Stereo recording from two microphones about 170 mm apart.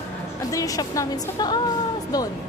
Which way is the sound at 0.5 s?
20° left (ahead or behind).